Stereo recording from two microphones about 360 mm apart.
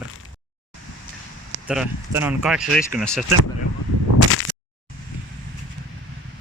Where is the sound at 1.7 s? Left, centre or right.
Centre.